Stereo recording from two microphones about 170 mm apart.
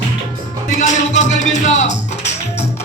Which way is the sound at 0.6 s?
45° left (ahead or behind).